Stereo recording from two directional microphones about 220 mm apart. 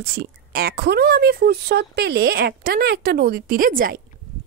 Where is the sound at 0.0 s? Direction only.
45° right (ahead or behind).